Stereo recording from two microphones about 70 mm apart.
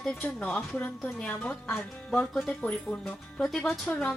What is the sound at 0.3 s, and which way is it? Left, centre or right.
A woman's voice, centre.